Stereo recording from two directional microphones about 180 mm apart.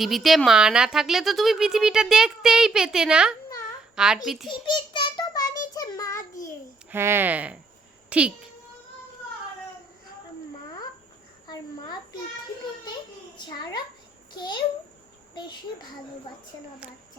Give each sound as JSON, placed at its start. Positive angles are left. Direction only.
{"t": 0.0, "sound": "a child's voice", "side_deg": 0}
{"t": 4.9, "sound": "child singing", "side_deg": 25}
{"t": 6.9, "sound": "speech", "side_deg": -10}
{"t": 11.4, "sound": "a sound", "side_deg": 25}
{"t": 14.3, "sound": "a child's voice", "side_deg": 25}
{"t": 16.8, "sound": "speech", "side_deg": -5}